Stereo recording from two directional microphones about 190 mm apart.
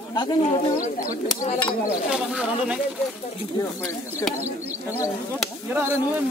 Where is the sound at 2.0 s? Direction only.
5° right (ahead or behind).